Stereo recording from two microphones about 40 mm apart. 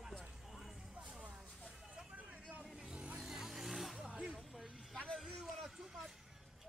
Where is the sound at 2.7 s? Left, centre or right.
Centre.